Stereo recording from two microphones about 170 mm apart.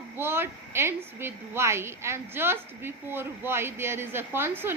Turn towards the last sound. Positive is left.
turn(degrees=-15)  # may be behind; listen again after turning